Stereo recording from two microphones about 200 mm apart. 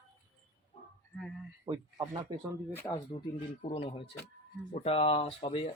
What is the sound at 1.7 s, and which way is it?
Speech, 20° right (ahead or behind).